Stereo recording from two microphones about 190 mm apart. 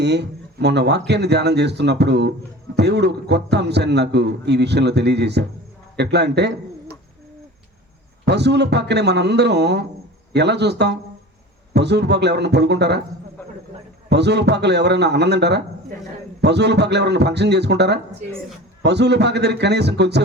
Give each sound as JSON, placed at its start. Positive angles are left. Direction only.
{"t": 0.0, "sound": "a man's voice", "side_deg": -60}
{"t": 8.2, "sound": "a man's voice", "side_deg": -60}
{"t": 14.1, "sound": "a man's voice", "side_deg": -60}